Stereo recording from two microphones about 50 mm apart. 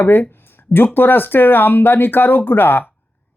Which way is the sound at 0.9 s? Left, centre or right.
Left.